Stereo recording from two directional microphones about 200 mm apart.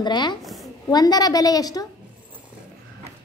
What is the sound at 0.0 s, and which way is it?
A woman's voice, 20° left (ahead or behind).